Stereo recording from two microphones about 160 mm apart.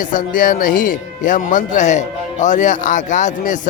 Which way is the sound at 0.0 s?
55° left (ahead or behind).